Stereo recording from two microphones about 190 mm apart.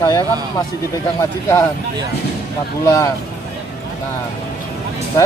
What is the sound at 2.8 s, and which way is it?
Speech, 15° left (ahead or behind).